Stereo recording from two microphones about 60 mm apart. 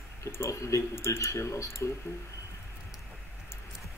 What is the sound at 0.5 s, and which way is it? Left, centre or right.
Speech, left.